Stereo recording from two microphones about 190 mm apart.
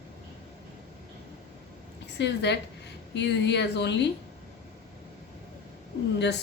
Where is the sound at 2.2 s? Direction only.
65° left (ahead or behind).